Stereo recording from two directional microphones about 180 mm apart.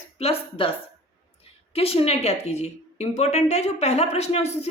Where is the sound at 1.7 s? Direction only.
35° left (ahead or behind).